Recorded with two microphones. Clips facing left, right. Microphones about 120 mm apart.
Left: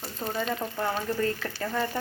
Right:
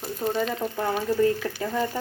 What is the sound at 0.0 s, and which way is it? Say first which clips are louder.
Speech: right 5 dB; 10° right (ahead or behind).